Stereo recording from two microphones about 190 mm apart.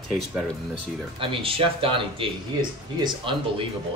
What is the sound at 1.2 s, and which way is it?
Speech, 30° right (ahead or behind).